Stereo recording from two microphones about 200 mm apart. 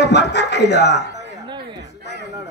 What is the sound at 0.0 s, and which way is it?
Speech, 60° left (ahead or behind).